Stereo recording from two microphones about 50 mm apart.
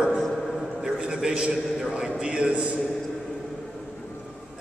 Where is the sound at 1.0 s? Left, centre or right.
Centre.